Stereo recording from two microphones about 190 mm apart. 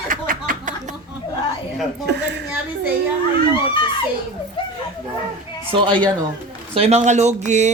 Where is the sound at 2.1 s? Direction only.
60° right (ahead or behind).